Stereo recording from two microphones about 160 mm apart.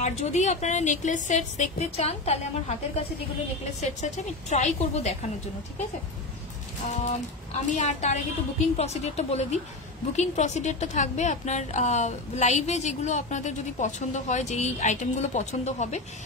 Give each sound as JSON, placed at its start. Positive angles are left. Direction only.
{"t": 0.0, "sound": "a woman's voice", "side_deg": 50}
{"t": 3.8, "sound": "a woman's voice", "side_deg": 45}
{"t": 6.8, "sound": "a woman's voice", "side_deg": 50}